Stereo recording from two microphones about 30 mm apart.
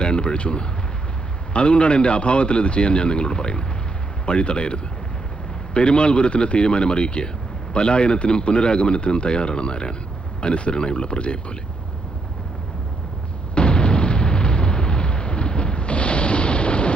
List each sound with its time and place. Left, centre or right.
0.0 s speech: left
13.6 s artillery fire: left